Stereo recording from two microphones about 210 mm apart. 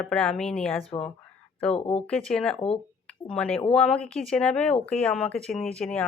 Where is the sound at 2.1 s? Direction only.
5° left (ahead or behind).